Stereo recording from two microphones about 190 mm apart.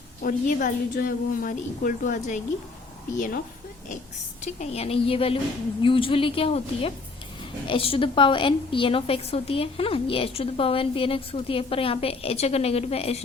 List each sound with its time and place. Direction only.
0.2 s a woman's voice: 45° left (ahead or behind)
4.4 s a woman's voice: 35° left (ahead or behind)